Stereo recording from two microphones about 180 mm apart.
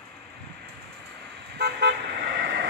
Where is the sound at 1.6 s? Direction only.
70° right (ahead or behind).